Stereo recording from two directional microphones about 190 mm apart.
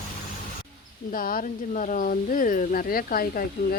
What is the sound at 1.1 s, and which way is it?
Speech, 45° left (ahead or behind).